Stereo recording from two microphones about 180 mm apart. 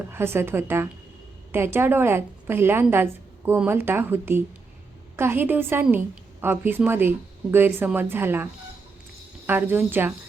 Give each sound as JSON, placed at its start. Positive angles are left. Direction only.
{"t": 0.1, "sound": "a woman's voice", "side_deg": -15}
{"t": 9.5, "sound": "a woman's voice", "side_deg": -10}